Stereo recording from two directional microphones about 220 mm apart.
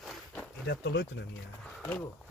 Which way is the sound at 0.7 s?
50° left (ahead or behind).